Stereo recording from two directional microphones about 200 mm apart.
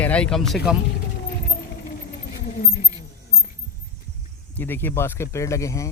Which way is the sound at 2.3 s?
45° left (ahead or behind).